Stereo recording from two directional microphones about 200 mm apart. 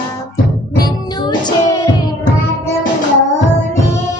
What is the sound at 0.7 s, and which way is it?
Music, 20° left (ahead or behind).